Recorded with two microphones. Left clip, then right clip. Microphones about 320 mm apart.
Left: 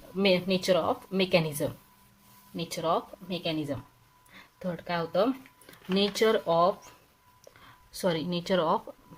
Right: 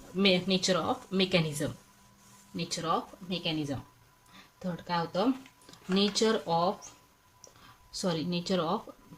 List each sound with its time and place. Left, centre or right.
0.2 s a woman's voice: centre
8.0 s speech: centre